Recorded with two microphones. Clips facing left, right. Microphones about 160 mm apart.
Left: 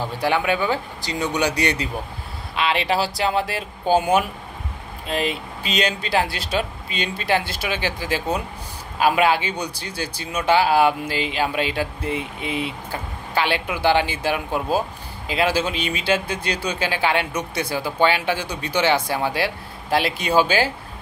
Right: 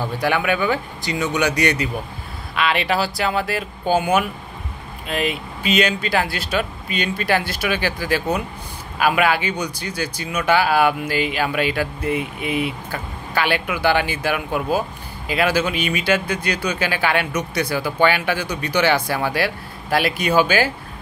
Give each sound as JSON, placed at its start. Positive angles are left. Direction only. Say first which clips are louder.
{"t": 0.2, "sound": "speech", "louder": "even", "side_deg": 30}